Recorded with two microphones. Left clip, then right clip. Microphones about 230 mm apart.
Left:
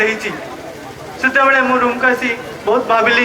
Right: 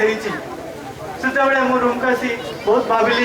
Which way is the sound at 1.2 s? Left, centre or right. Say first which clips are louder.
Left 4 dB; centre.